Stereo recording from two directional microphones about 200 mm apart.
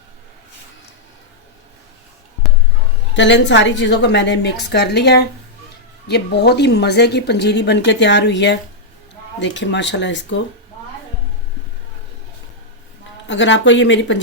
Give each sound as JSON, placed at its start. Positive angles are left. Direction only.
{"t": 3.2, "sound": "a woman's voice", "side_deg": 65}
{"t": 13.2, "sound": "a woman's voice", "side_deg": 65}